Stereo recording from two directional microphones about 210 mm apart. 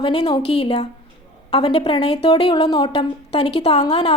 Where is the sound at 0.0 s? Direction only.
20° left (ahead or behind).